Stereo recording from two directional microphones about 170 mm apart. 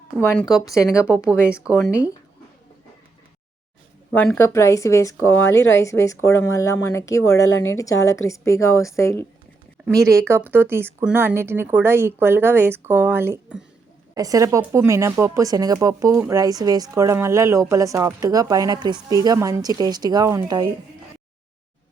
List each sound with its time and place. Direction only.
0.6 s speech: 20° left (ahead or behind)
1.0 s speech: 5° right (ahead or behind)
4.1 s speech: 10° left (ahead or behind)
9.9 s speech: 15° right (ahead or behind)